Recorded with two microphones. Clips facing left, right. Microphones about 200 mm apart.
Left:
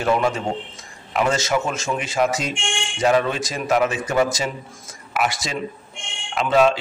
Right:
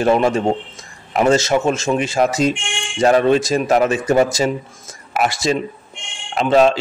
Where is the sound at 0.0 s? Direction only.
30° right (ahead or behind).